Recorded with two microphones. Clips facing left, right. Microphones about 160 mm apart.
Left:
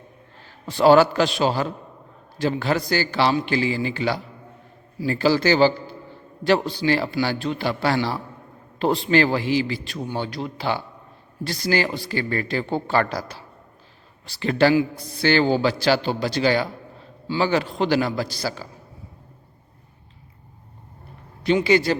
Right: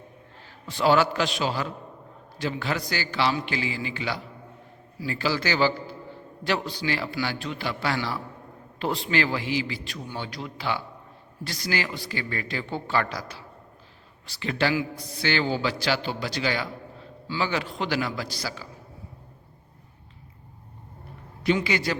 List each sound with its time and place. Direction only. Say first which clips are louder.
0.6 s a man's voice: left 7 dB; 35° left (ahead or behind)
21.4 s a man's voice: left 6 dB; 30° left (ahead or behind)